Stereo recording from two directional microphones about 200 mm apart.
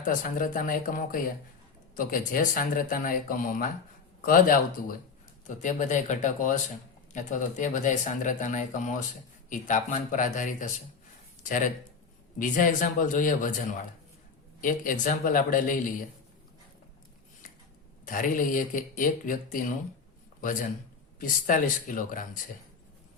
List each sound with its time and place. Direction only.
0.0 s speech: 40° left (ahead or behind)
18.0 s speech: 40° left (ahead or behind)